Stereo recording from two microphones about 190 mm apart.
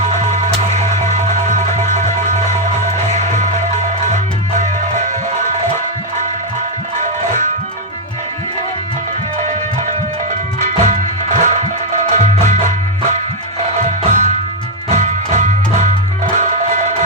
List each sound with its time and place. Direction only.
0.0 s music: 40° right (ahead or behind)
10.6 s music: 40° right (ahead or behind)